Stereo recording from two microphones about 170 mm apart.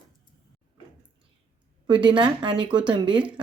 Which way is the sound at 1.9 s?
30° right (ahead or behind).